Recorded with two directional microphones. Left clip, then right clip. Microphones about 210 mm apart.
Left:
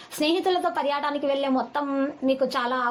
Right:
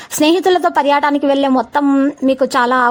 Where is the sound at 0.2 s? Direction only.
45° right (ahead or behind).